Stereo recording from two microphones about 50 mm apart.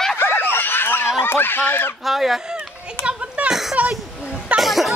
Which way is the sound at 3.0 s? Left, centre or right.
Right.